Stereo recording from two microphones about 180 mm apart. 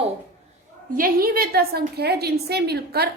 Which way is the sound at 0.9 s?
55° right (ahead or behind).